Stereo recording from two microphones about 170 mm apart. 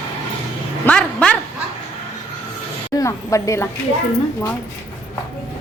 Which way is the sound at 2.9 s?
20° left (ahead or behind).